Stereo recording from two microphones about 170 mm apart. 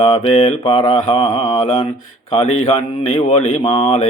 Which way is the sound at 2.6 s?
35° left (ahead or behind).